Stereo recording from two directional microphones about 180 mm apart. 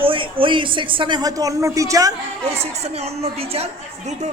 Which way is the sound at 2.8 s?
35° right (ahead or behind).